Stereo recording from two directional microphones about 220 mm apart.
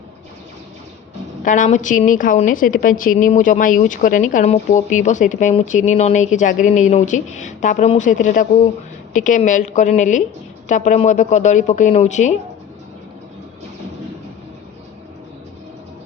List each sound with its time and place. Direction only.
1.5 s a woman's voice: 35° left (ahead or behind)